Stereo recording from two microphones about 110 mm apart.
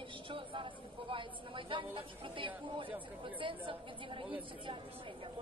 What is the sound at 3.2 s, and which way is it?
Speech, 50° right (ahead or behind).